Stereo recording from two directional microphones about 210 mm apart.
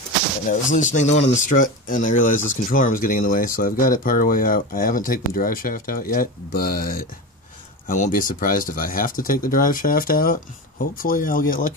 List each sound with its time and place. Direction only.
0.5 s speech: 35° left (ahead or behind)